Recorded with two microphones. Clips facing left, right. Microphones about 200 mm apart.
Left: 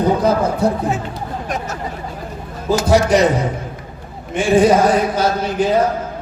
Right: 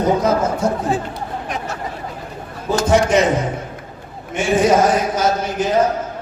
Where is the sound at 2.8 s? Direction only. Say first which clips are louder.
Left 1 dB; 35° left (ahead or behind).